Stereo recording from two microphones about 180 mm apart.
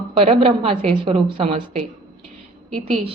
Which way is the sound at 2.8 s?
35° right (ahead or behind).